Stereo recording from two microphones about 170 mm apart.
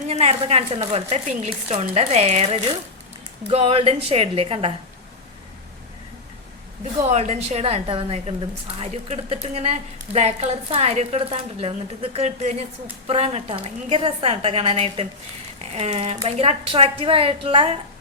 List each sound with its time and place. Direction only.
0.1 s a woman's voice: 35° right (ahead or behind)
7.0 s a woman's voice: 40° right (ahead or behind)